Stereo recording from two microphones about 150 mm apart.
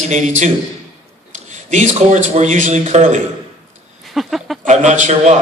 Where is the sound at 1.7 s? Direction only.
50° right (ahead or behind).